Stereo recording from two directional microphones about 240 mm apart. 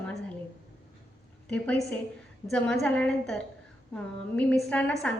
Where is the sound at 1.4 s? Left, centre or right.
Centre.